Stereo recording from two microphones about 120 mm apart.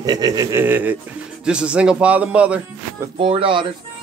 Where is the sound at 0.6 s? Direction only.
15° right (ahead or behind).